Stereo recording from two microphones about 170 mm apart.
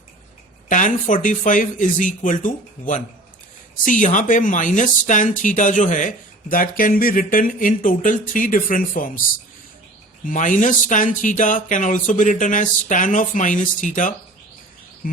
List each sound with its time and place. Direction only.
0.7 s speech: 50° left (ahead or behind)
10.2 s speech: 50° left (ahead or behind)
15.0 s bird: 55° left (ahead or behind)